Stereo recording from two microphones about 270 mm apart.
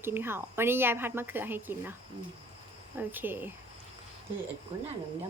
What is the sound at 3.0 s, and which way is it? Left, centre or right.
Speech, centre.